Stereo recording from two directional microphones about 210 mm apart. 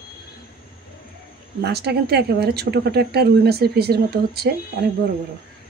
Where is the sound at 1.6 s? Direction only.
50° right (ahead or behind).